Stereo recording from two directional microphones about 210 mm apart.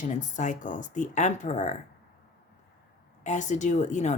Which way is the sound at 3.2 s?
35° left (ahead or behind).